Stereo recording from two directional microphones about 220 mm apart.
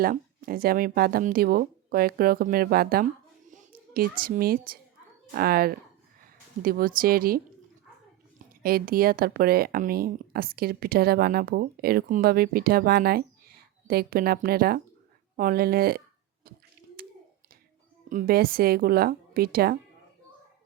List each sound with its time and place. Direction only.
0.0 s speech: 40° right (ahead or behind)
3.5 s a sound: 35° right (ahead or behind)
4.2 s speech: 40° right (ahead or behind)
8.6 s speech: 40° right (ahead or behind)
18.1 s speech: 40° right (ahead or behind)